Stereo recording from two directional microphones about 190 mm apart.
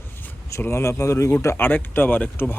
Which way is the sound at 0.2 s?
15° left (ahead or behind).